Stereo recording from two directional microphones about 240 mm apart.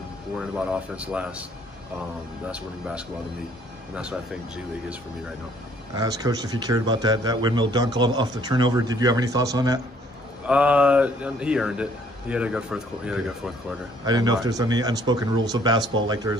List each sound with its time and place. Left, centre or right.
0.4 s a man's voice: centre
2.5 s a man's voice: centre
5.9 s a man's voice: centre
14.0 s a man's voice: centre